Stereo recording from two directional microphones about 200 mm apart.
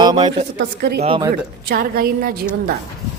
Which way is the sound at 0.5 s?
55° right (ahead or behind).